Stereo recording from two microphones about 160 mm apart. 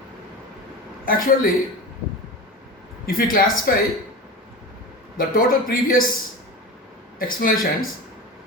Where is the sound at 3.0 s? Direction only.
65° left (ahead or behind).